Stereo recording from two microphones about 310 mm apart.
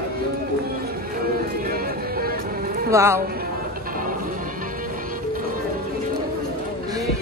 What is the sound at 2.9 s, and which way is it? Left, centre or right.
Speech, centre.